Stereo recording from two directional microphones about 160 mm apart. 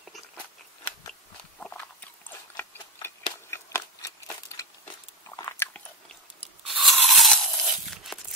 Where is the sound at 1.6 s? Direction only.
10° left (ahead or behind).